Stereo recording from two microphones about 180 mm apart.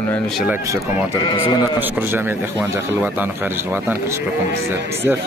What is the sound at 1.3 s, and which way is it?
Speech, 25° left (ahead or behind).